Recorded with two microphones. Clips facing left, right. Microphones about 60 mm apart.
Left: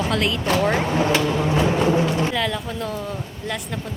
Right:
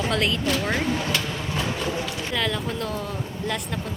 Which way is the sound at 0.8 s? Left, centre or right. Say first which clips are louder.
Left 5 dB; left.